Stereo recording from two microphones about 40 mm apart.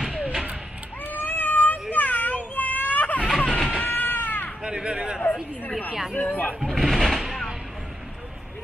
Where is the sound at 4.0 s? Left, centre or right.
Left.